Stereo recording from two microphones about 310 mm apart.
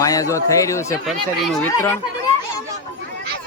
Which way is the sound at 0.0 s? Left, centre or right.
Centre.